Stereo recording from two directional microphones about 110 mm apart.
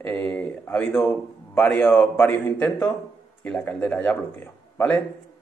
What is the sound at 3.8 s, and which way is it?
A man's voice, 15° left (ahead or behind).